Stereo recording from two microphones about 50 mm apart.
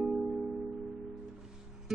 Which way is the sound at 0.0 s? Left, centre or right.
Centre.